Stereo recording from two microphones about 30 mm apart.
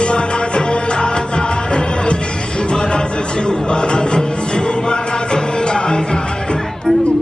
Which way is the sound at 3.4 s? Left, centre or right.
Left.